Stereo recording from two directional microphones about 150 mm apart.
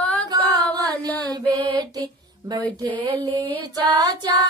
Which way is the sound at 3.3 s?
10° left (ahead or behind).